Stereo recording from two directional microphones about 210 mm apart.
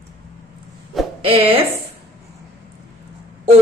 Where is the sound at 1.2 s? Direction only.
25° right (ahead or behind).